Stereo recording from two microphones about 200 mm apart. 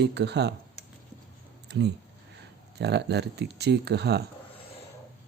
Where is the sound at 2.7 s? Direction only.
55° right (ahead or behind).